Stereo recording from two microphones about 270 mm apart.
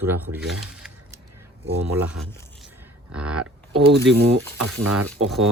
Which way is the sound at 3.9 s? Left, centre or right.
Right.